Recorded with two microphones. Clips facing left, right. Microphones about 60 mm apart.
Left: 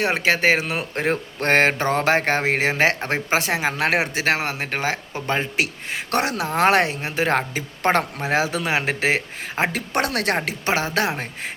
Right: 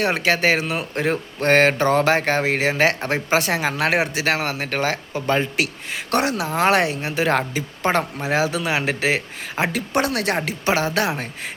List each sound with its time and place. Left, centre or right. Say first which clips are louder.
0.0 s speech: even; left
0.6 s speech: right 1 dB; left
7.8 s speech: left 1 dB; left